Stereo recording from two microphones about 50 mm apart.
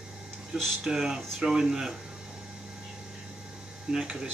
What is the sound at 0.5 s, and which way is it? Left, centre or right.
Speech, centre.